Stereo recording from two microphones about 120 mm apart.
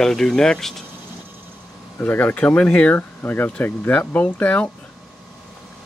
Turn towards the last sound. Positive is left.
turn(degrees=15)  # may be behind; listen again after turning